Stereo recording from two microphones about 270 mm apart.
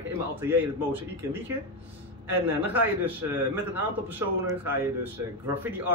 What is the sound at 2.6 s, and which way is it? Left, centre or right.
Speech, centre.